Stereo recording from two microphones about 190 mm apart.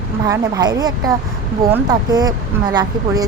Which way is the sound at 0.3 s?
20° right (ahead or behind).